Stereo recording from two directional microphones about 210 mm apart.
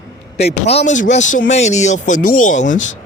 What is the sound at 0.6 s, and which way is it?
Speech, 30° left (ahead or behind).